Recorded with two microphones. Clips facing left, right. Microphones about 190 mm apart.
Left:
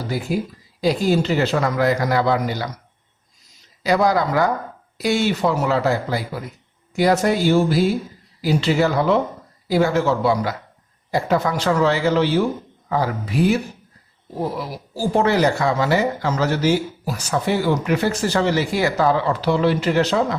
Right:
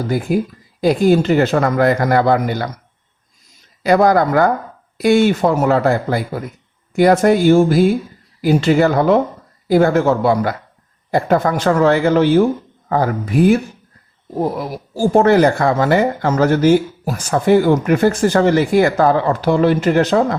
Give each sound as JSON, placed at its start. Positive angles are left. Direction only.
{"t": 0.0, "sound": "speech", "side_deg": -55}
{"t": 3.8, "sound": "speech", "side_deg": -55}